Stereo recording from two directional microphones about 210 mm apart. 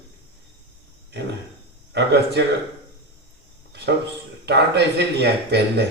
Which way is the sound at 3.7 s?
55° right (ahead or behind).